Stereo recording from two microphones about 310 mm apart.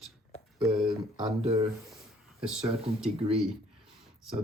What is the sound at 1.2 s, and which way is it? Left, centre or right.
Speech, centre.